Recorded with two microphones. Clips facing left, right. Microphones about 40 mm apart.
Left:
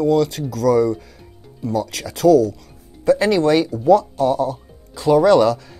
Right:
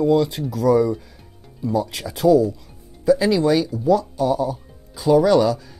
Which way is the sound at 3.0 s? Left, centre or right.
Left.